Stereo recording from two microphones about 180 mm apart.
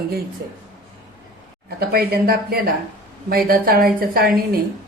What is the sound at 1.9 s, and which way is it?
A woman's voice, 60° right (ahead or behind).